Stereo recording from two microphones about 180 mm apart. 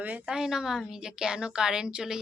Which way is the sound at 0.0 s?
10° right (ahead or behind).